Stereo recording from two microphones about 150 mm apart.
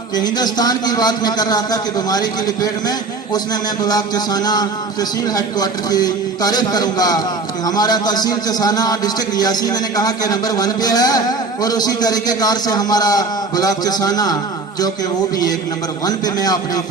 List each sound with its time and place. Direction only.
0.2 s a man's voice: 25° left (ahead or behind)
16.0 s a man's voice: 25° left (ahead or behind)